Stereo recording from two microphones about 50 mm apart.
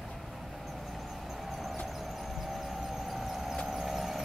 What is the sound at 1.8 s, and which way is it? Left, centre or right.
Squeal, centre.